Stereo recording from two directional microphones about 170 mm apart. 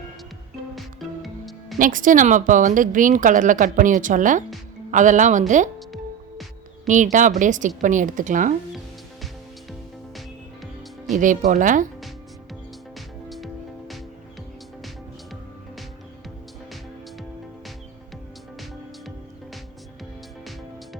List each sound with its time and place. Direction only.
0.8 s music: centre (ahead or behind)
1.8 s speech: 50° right (ahead or behind)
6.8 s speech: 45° right (ahead or behind)
11.1 s speech: 50° right (ahead or behind)
13.2 s music: centre (ahead or behind)